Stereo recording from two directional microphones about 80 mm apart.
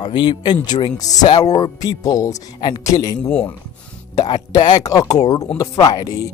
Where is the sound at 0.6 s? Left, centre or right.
Left.